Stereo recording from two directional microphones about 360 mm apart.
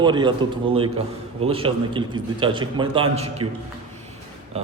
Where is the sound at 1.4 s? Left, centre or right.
Centre.